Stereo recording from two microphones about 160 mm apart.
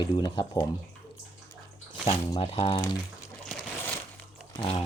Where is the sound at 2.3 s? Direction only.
35° left (ahead or behind).